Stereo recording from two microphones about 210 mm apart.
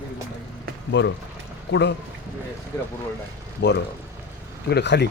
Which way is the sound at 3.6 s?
55° left (ahead or behind).